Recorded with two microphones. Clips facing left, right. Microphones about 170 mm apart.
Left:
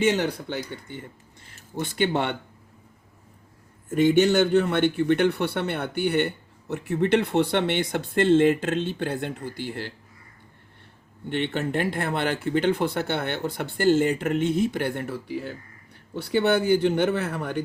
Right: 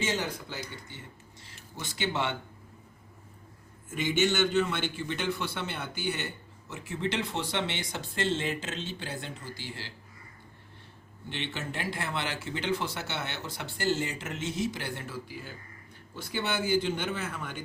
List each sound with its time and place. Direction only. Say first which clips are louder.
0.0 s a man's voice: left 9 dB; 65° left (ahead or behind)
3.8 s a man's voice: left 9 dB; 60° left (ahead or behind)
11.3 s a man's voice: left 11 dB; 55° left (ahead or behind)